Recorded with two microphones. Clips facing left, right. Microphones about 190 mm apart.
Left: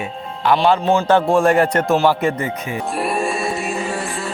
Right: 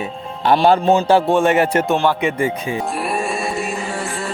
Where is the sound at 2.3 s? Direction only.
25° right (ahead or behind).